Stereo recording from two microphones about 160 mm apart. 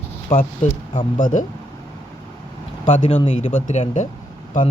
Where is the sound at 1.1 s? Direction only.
55° left (ahead or behind).